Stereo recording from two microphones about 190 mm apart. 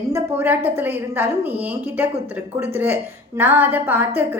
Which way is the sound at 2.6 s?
10° right (ahead or behind).